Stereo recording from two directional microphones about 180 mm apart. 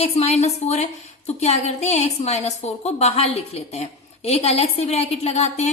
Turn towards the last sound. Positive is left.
turn(degrees=35)  # may be behind; listen again after turning